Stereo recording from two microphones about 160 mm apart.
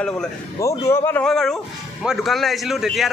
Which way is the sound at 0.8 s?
15° left (ahead or behind).